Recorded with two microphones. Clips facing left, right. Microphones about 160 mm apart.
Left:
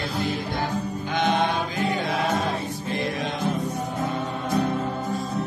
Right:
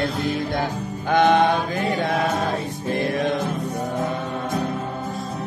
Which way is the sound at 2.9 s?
55° right (ahead or behind).